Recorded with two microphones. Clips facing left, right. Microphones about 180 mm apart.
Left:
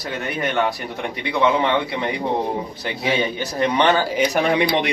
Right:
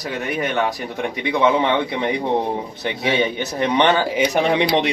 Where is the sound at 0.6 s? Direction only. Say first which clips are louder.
Even; 15° right (ahead or behind).